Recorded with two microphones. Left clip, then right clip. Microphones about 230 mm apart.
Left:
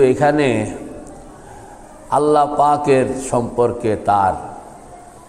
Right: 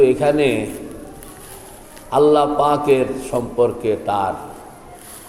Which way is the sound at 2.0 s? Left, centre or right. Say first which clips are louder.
Even; left.